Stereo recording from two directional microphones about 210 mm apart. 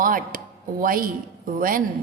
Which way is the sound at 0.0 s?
40° right (ahead or behind).